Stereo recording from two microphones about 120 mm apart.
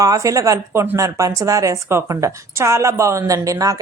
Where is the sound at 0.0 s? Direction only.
30° right (ahead or behind).